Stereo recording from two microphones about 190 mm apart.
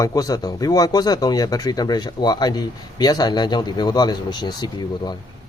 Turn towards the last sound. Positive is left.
turn(degrees=20)  # may be behind; listen again after turning